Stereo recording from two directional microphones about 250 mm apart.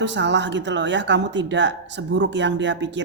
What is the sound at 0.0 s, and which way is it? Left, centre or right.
Speech, right.